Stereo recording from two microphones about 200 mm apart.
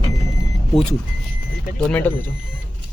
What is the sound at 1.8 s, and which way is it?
Speech, 5° left (ahead or behind).